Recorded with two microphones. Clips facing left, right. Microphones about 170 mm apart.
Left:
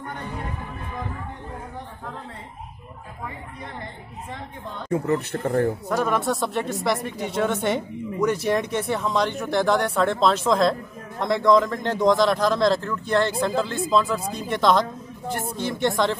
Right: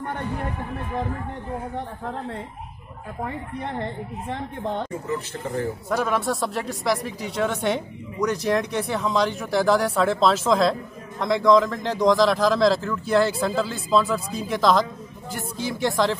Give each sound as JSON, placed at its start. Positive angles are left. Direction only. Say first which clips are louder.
{"t": 4.3, "sound": "a woman's voice", "louder": "right 8 dB", "side_deg": -60}
{"t": 4.8, "sound": "speech", "louder": "left 6 dB", "side_deg": 60}
{"t": 5.9, "sound": "speech", "louder": "left 1 dB", "side_deg": 0}